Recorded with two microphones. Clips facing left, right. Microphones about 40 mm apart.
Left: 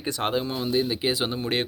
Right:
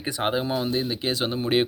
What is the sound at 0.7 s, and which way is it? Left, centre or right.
Speech, centre.